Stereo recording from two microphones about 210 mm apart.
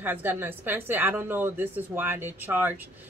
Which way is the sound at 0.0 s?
10° right (ahead or behind).